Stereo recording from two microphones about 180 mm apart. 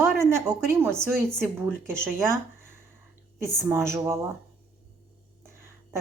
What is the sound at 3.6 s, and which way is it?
Speech, 15° right (ahead or behind).